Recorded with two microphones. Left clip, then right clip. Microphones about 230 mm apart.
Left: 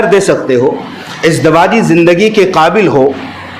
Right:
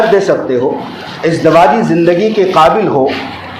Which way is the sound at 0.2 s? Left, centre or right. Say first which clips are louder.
Left 2 dB; left.